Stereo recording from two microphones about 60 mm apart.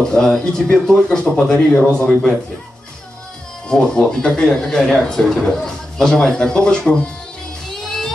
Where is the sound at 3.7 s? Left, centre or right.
Centre.